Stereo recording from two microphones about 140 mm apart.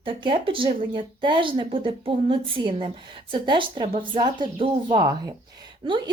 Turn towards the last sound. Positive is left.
turn(degrees=-35)  # may be behind; listen again after turning